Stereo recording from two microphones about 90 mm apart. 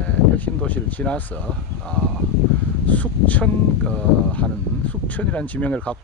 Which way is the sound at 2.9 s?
15° left (ahead or behind).